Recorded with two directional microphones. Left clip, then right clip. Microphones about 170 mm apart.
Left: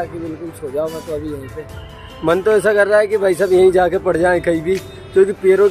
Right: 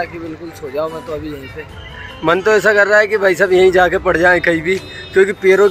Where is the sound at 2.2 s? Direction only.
Centre (ahead or behind).